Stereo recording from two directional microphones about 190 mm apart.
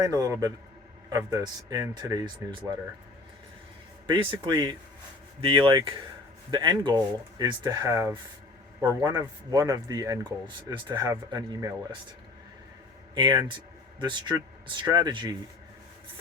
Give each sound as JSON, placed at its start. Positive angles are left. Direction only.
{"t": 0.0, "sound": "a man's voice", "side_deg": -20}
{"t": 4.0, "sound": "speech", "side_deg": -25}
{"t": 13.1, "sound": "speech", "side_deg": -20}